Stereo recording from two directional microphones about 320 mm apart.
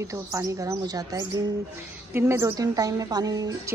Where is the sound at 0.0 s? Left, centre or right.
Centre.